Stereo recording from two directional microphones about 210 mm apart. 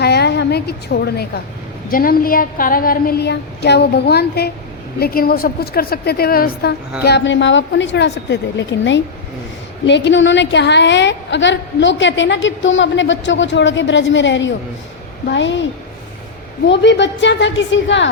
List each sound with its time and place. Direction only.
0.0 s a sound: 50° left (ahead or behind)
1.9 s a woman's voice: 45° left (ahead or behind); by 15.6 s 60° left (ahead or behind)
16.6 s a woman's voice: 60° left (ahead or behind)